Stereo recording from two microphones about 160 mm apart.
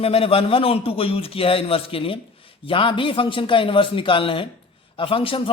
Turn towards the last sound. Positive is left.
turn(degrees=35)  # may be behind; listen again after turning